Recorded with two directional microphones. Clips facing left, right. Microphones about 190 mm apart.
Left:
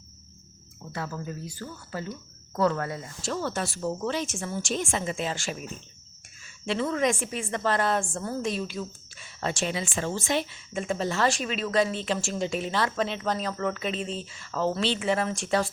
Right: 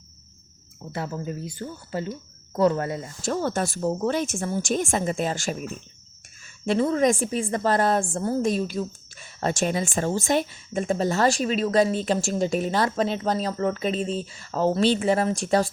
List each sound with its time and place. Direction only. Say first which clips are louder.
0.9 s speech: right 4 dB; 25° right (ahead or behind)
3.2 s a woman's voice: right 5 dB; 45° right (ahead or behind)
6.7 s speech: right 5 dB; 40° right (ahead or behind)